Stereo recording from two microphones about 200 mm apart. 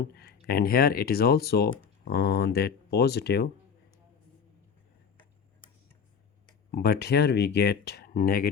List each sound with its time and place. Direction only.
0.4 s speech: 50° left (ahead or behind)
6.7 s speech: 50° left (ahead or behind)